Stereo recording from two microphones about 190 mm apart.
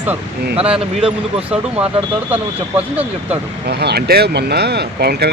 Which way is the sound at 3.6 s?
55° right (ahead or behind).